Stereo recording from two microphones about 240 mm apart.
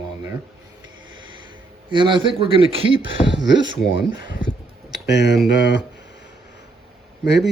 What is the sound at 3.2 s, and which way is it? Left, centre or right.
Speech, centre.